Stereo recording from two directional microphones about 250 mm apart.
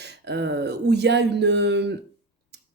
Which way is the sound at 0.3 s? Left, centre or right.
Right.